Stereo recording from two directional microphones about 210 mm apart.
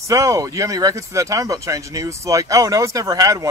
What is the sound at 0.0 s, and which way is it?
Speech, 15° right (ahead or behind).